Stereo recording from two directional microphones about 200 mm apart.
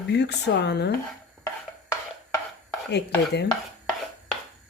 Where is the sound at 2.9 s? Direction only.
55° left (ahead or behind).